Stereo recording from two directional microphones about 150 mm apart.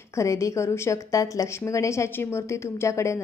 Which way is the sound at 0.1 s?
20° left (ahead or behind).